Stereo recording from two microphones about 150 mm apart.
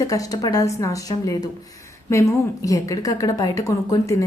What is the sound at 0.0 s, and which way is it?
A woman's voice, 25° left (ahead or behind).